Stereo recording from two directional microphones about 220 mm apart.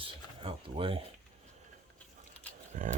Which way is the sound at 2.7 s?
35° right (ahead or behind).